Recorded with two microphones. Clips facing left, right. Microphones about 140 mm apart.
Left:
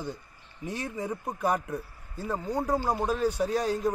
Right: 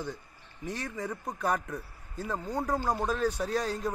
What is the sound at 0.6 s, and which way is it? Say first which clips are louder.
A man's voice: left 2 dB; 5° left (ahead or behind).